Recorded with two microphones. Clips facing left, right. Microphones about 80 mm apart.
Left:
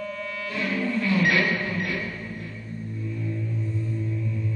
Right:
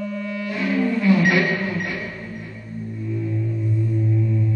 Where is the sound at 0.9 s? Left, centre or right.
Right.